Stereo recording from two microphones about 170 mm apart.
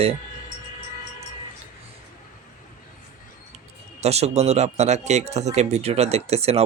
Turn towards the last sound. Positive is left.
turn(degrees=-35)  # may be behind; listen again after turning